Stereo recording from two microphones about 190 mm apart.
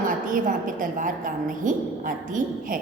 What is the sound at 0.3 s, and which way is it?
A woman's voice, 45° right (ahead or behind).